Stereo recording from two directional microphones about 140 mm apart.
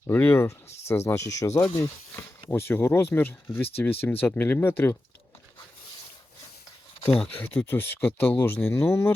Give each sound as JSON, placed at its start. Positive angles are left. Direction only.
{"t": 0.1, "sound": "speech", "side_deg": 15}
{"t": 7.1, "sound": "speech", "side_deg": 5}
{"t": 7.4, "sound": "speech", "side_deg": 15}